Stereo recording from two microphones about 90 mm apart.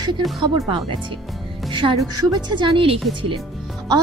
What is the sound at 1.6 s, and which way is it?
A woman's voice, 60° right (ahead or behind).